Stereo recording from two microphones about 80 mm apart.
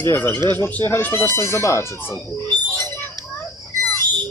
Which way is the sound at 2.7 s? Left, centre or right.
Left.